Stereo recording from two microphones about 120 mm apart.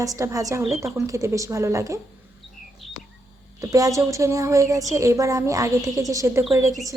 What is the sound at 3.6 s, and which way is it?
A woman's voice, 30° right (ahead or behind).